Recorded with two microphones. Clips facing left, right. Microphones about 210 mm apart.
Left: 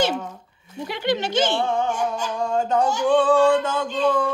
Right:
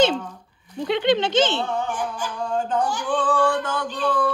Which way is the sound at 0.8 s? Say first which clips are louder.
Right 4 dB; 20° right (ahead or behind).